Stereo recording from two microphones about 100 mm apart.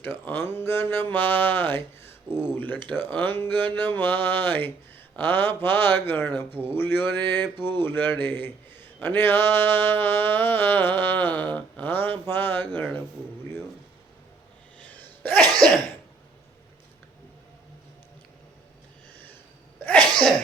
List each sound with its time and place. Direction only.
0.0 s a man's voice: 25° left (ahead or behind)
15.3 s cough: 5° left (ahead or behind)
19.1 s a sound: 20° left (ahead or behind)
19.8 s sneeze: 10° left (ahead or behind)